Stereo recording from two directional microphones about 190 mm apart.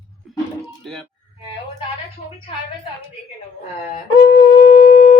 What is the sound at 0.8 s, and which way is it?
Speech, centre (ahead or behind).